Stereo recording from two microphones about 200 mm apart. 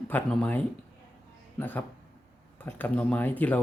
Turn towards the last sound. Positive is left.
turn(degrees=10)  # may be behind; listen again after turning